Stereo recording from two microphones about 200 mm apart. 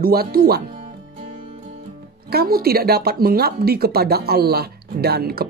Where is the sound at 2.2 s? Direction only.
50° right (ahead or behind).